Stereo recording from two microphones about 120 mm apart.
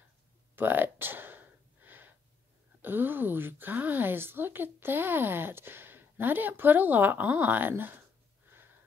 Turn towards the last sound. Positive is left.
turn(degrees=-15)  # may be behind; listen again after turning